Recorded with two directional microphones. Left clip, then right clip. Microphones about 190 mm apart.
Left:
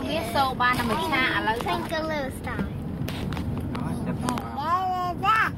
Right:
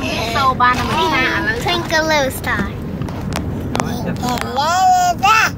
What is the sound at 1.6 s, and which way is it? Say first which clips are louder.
Speech: right 11 dB; 20° right (ahead or behind).